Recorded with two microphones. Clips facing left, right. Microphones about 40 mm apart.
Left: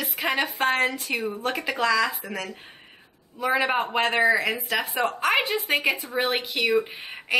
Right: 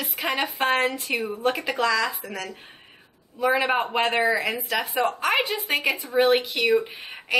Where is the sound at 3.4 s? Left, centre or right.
Centre.